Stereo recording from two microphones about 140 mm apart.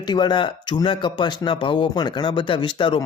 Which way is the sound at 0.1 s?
35° left (ahead or behind).